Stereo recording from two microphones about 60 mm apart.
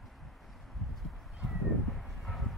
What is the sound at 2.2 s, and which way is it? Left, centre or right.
Vehicle, centre.